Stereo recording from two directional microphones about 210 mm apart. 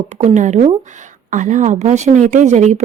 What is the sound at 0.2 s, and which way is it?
A woman's voice, 35° right (ahead or behind).